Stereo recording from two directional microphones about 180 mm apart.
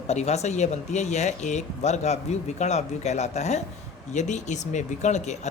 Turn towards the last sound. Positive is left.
turn(degrees=40)  # may be behind; listen again after turning